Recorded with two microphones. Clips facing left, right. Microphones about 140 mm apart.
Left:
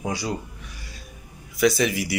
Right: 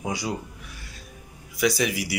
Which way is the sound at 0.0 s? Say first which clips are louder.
Left 1 dB; 15° right (ahead or behind).